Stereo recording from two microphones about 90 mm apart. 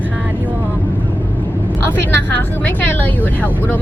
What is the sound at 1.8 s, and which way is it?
Speech, 25° left (ahead or behind).